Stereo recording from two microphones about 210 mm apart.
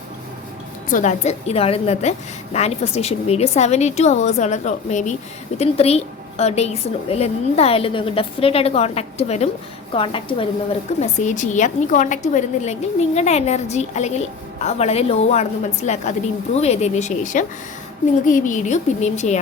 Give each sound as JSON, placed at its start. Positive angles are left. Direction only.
{"t": 0.9, "sound": "a woman's voice", "side_deg": 35}
{"t": 11.0, "sound": "a woman's voice", "side_deg": 35}